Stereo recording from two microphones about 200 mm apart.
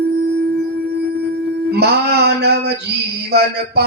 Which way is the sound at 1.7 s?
55° right (ahead or behind).